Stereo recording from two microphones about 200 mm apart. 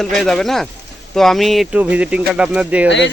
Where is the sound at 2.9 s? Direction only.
60° left (ahead or behind).